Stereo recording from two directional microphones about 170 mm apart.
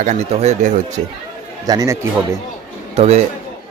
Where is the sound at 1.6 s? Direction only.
20° right (ahead or behind).